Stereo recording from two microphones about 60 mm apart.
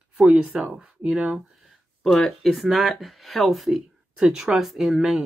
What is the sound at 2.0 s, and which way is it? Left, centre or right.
Speech, centre.